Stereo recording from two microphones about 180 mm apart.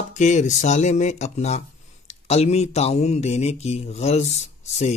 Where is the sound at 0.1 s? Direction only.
40° left (ahead or behind).